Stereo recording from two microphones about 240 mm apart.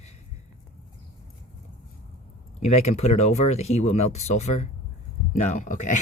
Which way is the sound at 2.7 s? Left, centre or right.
Left.